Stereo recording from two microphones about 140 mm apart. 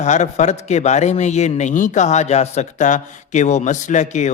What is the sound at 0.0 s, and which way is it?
A man's voice, 55° left (ahead or behind).